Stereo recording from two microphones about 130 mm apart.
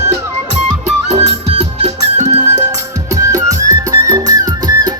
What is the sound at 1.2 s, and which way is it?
Music, 50° right (ahead or behind).